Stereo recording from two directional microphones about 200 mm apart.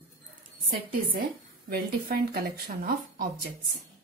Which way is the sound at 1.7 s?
50° right (ahead or behind).